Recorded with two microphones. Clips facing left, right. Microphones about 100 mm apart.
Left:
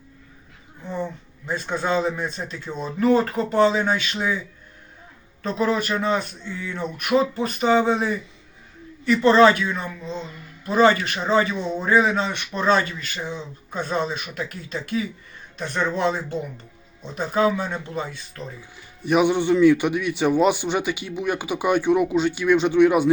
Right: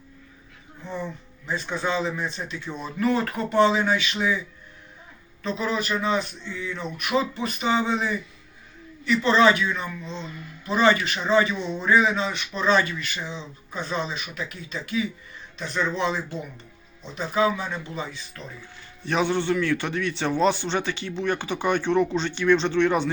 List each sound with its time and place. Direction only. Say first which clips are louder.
1.5 s speech: left 3 dB; 50° left (ahead or behind)
5.4 s speech: left 4 dB; 45° left (ahead or behind)
19.0 s a man's voice: left 5 dB; 15° left (ahead or behind)